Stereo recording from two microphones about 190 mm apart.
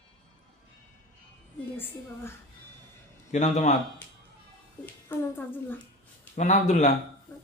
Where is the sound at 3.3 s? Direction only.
40° left (ahead or behind).